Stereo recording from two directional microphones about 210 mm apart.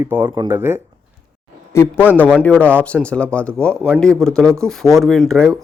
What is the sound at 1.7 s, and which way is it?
Speech, 10° left (ahead or behind).